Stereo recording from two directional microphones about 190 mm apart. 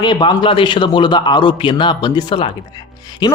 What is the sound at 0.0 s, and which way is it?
A man's voice, 25° left (ahead or behind).